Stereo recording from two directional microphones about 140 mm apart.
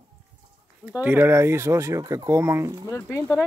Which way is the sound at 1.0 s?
15° right (ahead or behind).